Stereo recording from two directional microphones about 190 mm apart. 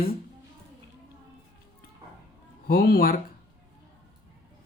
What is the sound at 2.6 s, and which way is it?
Speech, 55° left (ahead or behind).